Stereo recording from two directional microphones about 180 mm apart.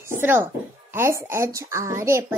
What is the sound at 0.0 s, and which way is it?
Music, 10° right (ahead or behind).